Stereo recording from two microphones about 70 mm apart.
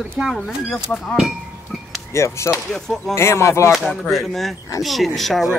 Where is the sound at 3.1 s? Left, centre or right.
Left.